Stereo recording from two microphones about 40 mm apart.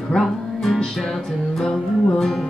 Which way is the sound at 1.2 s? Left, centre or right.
Centre.